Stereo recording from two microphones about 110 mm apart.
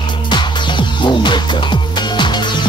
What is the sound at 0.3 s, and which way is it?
Music, 45° left (ahead or behind).